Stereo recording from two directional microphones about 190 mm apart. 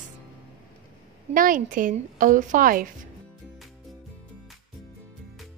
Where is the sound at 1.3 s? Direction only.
45° right (ahead or behind).